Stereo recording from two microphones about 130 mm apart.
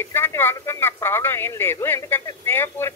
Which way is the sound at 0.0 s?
20° left (ahead or behind).